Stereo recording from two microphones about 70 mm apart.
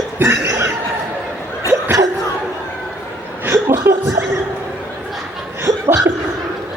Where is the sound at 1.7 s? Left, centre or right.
Right.